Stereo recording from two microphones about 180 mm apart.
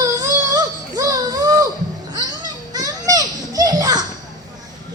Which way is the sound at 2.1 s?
20° right (ahead or behind).